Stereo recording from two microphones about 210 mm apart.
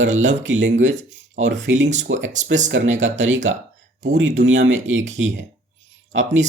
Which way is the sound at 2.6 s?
65° right (ahead or behind).